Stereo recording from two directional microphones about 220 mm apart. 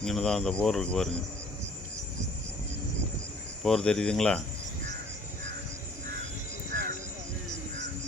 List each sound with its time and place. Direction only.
0.0 s speech: centre (ahead or behind)
3.6 s speech: 5° left (ahead or behind)
6.7 s music: 40° right (ahead or behind)